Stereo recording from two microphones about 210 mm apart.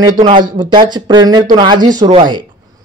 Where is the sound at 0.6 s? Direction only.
20° right (ahead or behind).